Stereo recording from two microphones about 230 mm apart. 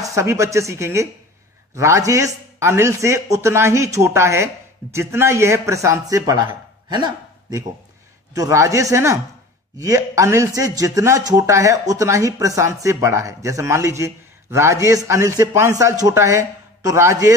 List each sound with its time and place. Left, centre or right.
0.0 s speech: centre